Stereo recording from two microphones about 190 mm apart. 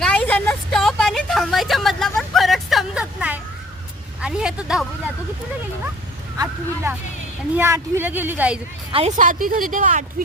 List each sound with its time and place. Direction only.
0.0 s vehicle: 5° left (ahead or behind)
4.2 s a sound: 5° right (ahead or behind)
6.3 s speech: 15° right (ahead or behind)
8.9 s speech: 30° right (ahead or behind)
9.1 s a woman's voice: 45° right (ahead or behind)